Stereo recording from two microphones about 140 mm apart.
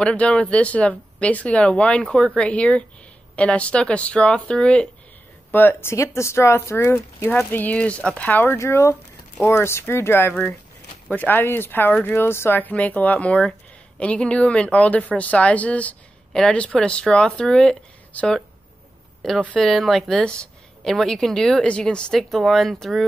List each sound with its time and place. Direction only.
0.0 s speech: 10° left (ahead or behind)